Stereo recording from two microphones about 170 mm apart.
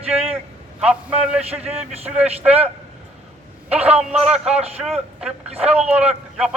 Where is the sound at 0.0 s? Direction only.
35° right (ahead or behind).